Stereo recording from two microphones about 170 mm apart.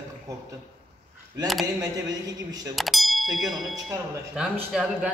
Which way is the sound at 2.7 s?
Centre (ahead or behind).